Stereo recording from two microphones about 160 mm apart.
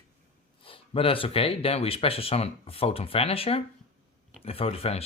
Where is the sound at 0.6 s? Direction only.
35° left (ahead or behind).